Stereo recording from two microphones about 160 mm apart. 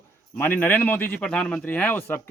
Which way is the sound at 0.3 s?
10° left (ahead or behind).